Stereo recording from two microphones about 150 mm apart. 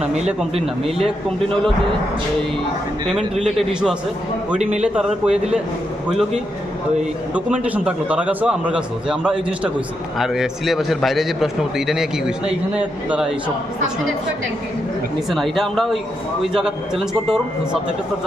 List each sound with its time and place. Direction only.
0.5 s a man's voice: 40° right (ahead or behind)
3.1 s a man's voice: centre (ahead or behind)
15.3 s a man's voice: centre (ahead or behind)